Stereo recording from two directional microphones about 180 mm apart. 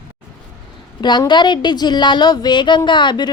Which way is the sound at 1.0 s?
25° left (ahead or behind).